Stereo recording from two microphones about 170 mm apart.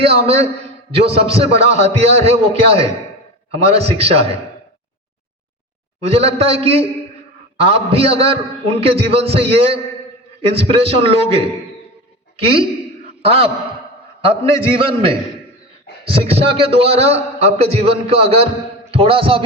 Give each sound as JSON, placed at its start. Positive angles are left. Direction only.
{"t": 0.1, "sound": "a man's voice", "side_deg": -35}
{"t": 6.0, "sound": "a man's voice", "side_deg": -35}